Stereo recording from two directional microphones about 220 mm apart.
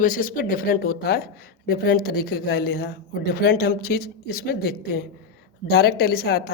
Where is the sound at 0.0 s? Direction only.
40° left (ahead or behind).